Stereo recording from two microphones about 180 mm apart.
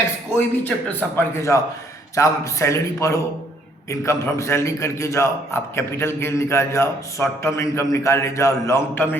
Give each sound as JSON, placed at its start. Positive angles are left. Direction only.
{"t": 0.3, "sound": "a man's voice", "side_deg": 10}